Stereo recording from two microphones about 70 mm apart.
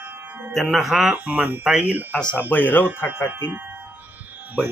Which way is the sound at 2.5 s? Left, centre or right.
Left.